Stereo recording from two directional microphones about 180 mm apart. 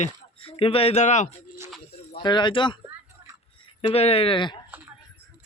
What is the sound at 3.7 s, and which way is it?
Speech, 30° left (ahead or behind).